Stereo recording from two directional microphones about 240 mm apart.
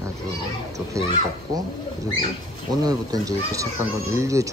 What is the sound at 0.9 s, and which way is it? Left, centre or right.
Speech, centre.